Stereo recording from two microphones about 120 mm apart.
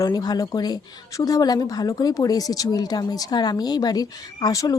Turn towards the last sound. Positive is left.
turn(degrees=30)  # may be behind; listen again after turning